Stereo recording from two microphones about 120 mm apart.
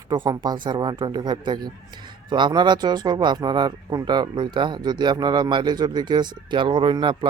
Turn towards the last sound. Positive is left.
turn(degrees=-40)  # may be behind; listen again after turning